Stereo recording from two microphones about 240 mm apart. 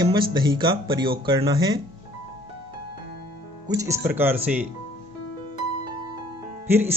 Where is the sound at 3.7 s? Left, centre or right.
Centre.